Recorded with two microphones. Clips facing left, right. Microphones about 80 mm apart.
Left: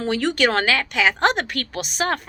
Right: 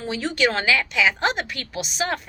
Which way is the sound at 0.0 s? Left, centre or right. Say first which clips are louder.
Left 3 dB; left.